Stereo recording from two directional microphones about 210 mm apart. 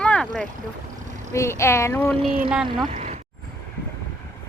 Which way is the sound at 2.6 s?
25° right (ahead or behind).